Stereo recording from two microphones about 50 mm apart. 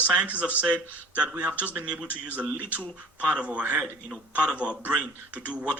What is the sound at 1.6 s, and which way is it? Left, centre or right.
Speech, right.